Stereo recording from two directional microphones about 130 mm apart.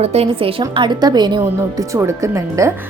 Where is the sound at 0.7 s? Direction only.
35° right (ahead or behind).